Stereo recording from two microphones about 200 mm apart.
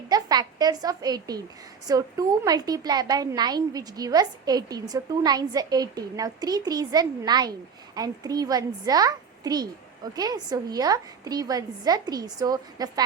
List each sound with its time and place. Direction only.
0.1 s a woman's voice: 20° right (ahead or behind)